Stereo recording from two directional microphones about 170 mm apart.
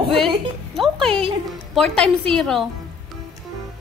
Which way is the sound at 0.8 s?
5° left (ahead or behind).